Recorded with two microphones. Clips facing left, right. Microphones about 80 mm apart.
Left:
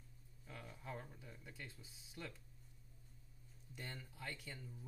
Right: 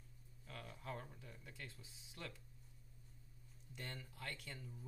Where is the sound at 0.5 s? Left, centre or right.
Centre.